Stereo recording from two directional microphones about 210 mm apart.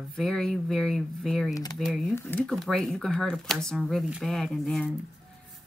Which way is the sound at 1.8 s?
Centre (ahead or behind).